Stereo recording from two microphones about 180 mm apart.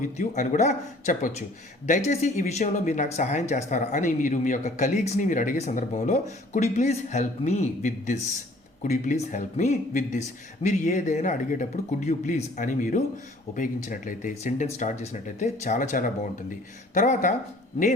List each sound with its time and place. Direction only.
0.0 s speech: 40° left (ahead or behind)